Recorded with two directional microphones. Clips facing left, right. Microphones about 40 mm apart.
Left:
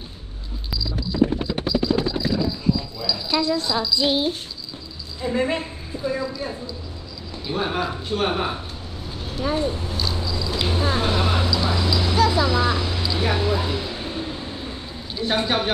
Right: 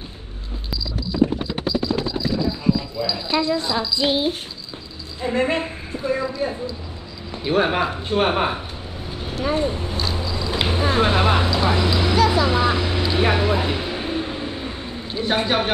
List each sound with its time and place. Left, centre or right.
3.1 s a woman's voice: right
3.6 s a woman's voice: centre
5.2 s a woman's voice: right
7.4 s a woman's voice: right
9.3 s a sound: right
15.3 s a woman's voice: right